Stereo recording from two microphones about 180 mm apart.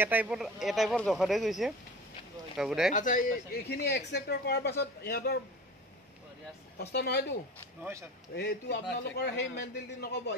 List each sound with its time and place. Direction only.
0.0 s speech: 10° right (ahead or behind)
2.9 s speech: 45° left (ahead or behind)
6.8 s speech: 65° left (ahead or behind)
8.4 s a man's voice: 65° left (ahead or behind)